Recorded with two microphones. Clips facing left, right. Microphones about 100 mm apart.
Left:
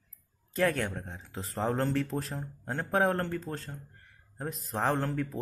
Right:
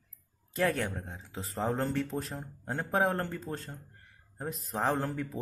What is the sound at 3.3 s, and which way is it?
Speech, 15° right (ahead or behind).